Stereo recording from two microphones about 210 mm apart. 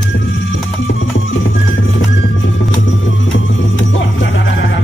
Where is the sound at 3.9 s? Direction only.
60° left (ahead or behind).